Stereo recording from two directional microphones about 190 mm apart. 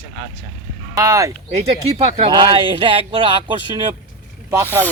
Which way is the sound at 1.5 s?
35° right (ahead or behind).